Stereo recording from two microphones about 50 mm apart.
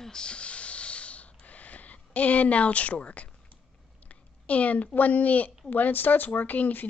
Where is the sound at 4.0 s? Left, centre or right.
Left.